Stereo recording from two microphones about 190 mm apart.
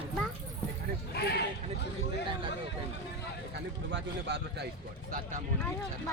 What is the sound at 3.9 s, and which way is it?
Speech, 65° right (ahead or behind).